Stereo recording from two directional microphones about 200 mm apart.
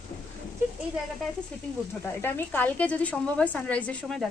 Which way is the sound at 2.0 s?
10° left (ahead or behind).